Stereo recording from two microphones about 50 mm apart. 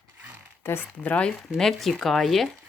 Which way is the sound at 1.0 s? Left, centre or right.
Left.